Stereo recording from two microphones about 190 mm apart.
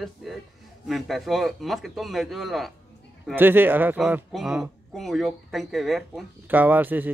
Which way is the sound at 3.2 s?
10° right (ahead or behind).